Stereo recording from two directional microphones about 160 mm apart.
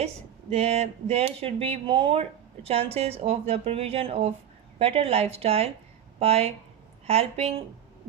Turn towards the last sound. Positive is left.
turn(degrees=-40)  # may be behind; listen again after turning